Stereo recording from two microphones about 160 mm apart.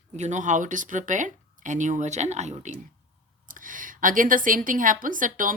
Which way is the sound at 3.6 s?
55° right (ahead or behind).